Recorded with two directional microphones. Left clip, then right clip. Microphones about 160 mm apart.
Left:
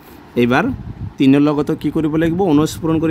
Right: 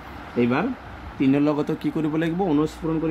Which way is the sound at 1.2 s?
65° left (ahead or behind).